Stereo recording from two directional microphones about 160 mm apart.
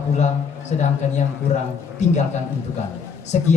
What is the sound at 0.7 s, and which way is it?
Speech, 45° left (ahead or behind).